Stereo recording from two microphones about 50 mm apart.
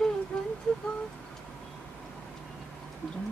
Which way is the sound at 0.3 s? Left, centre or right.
Centre.